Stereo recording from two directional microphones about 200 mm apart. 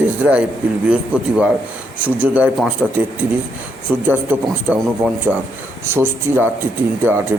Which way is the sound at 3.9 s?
10° right (ahead or behind).